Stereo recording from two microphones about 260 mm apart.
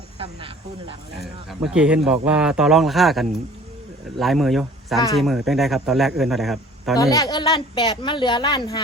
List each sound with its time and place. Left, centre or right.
0.2 s speech: right
1.1 s speech: centre
7.0 s a woman's voice: centre